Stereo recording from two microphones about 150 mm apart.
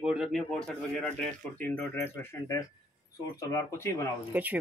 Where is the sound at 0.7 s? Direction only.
5° left (ahead or behind).